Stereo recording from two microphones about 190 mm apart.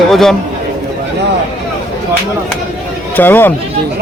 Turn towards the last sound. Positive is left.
turn(degrees=10)  # may be behind; listen again after turning